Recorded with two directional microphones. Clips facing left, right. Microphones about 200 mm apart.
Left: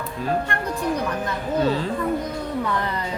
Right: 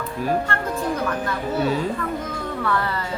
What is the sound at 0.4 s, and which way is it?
Speech, 15° left (ahead or behind).